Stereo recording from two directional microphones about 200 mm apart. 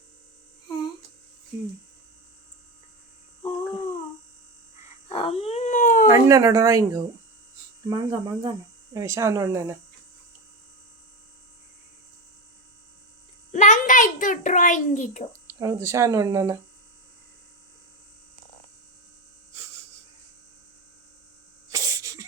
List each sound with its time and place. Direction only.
5.0 s dog: 30° left (ahead or behind)
6.1 s speech: 15° right (ahead or behind)
13.5 s a sound: 35° left (ahead or behind)
15.5 s speech: 15° right (ahead or behind)
21.7 s sneeze: 15° right (ahead or behind)